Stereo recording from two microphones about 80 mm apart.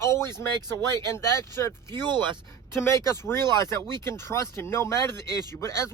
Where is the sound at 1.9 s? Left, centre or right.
Right.